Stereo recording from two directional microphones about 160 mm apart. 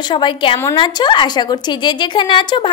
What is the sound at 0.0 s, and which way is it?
A woman's voice, 30° left (ahead or behind).